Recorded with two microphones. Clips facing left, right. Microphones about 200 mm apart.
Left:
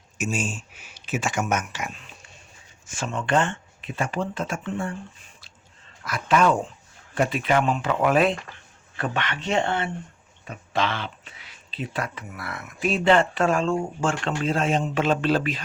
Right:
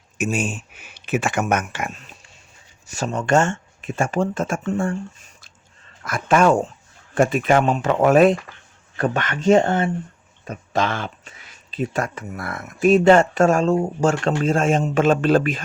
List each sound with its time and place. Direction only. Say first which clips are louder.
0.2 s speech: right 5 dB; 60° right (ahead or behind)
2.8 s speech: right 5 dB; 40° right (ahead or behind)